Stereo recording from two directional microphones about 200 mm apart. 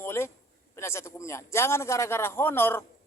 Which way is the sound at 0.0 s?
15° left (ahead or behind).